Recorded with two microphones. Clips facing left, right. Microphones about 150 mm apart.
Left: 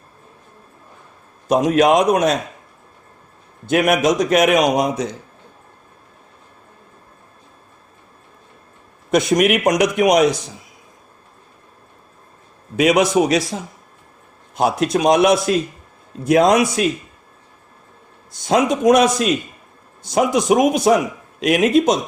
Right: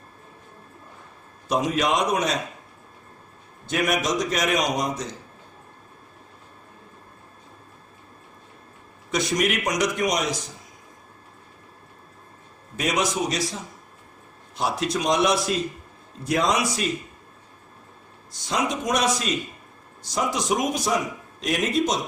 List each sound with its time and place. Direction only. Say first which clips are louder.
1.8 s a man's voice: left 9 dB; 50° left (ahead or behind)
3.7 s a man's voice: left 8 dB; 60° left (ahead or behind)
9.0 s a man's voice: left 8 dB; 55° left (ahead or behind)
12.7 s a man's voice: left 10 dB; 70° left (ahead or behind)
14.5 s a man's voice: left 8 dB; 50° left (ahead or behind)
18.3 s a man's voice: left 9 dB; 55° left (ahead or behind)